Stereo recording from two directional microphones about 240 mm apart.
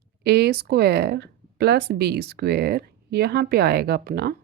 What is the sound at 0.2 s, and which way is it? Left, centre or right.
Speech, right.